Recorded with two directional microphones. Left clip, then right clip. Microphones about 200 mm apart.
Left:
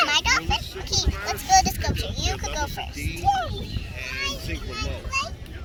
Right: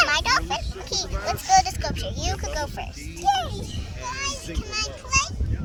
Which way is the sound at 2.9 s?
55° right (ahead or behind).